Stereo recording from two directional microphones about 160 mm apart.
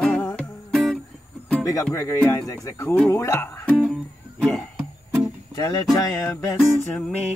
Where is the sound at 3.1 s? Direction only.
20° left (ahead or behind).